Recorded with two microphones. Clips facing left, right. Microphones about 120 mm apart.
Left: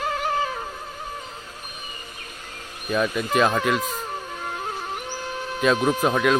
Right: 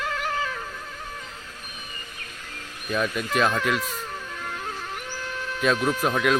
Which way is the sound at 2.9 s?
5° left (ahead or behind).